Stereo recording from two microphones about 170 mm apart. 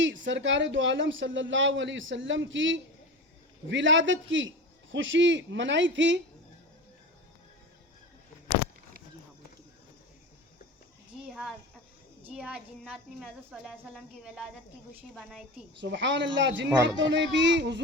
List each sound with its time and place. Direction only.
0.0 s speech: 90° right
11.3 s a sound: centre (ahead or behind)
12.2 s a woman's voice: 5° right (ahead or behind)
15.8 s speech: 90° right